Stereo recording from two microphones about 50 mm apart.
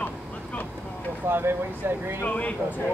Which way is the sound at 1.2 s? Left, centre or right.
Right.